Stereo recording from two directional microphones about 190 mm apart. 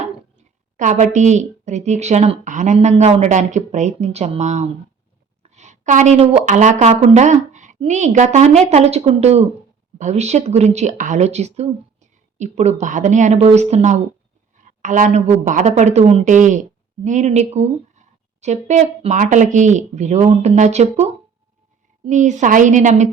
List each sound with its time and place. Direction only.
0.0 s a woman's voice: 40° right (ahead or behind)